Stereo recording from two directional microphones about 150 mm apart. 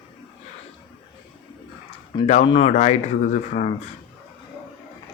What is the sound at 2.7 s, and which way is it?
Speech, 50° left (ahead or behind).